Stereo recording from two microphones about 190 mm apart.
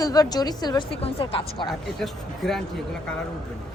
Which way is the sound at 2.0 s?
Centre (ahead or behind).